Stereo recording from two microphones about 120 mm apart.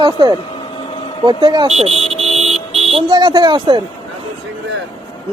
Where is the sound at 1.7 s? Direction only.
60° right (ahead or behind).